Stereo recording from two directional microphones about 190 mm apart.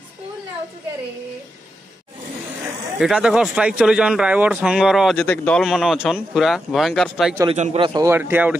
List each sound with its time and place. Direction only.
3.0 s speech: 5° right (ahead or behind)
5.2 s speech: 10° left (ahead or behind)
7.4 s a man's voice: 35° right (ahead or behind); by 8.5 s 10° right (ahead or behind)